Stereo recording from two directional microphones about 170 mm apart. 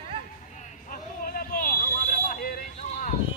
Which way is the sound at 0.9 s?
55° left (ahead or behind).